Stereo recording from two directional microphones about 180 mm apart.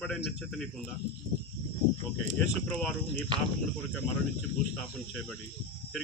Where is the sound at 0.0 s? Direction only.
5° left (ahead or behind).